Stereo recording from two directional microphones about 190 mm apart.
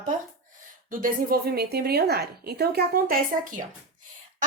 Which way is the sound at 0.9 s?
50° right (ahead or behind).